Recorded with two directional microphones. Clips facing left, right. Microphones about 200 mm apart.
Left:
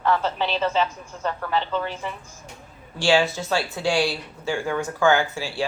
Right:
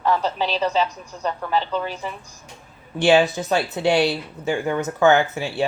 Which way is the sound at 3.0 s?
20° right (ahead or behind).